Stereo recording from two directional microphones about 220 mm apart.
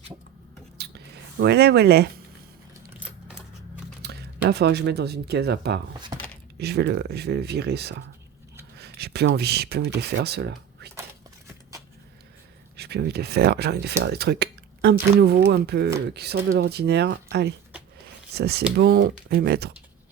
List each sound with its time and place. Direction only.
0.8 s squish: 50° right (ahead or behind)
3.0 s a sound: 5° right (ahead or behind)
4.0 s speech: 50° right (ahead or behind)
6.1 s a sound: 20° right (ahead or behind)
6.6 s speech: 50° right (ahead or behind)
12.7 s speech: 50° right (ahead or behind)